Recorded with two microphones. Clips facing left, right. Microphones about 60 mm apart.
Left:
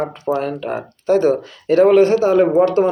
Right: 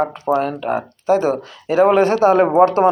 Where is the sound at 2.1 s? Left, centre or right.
Right.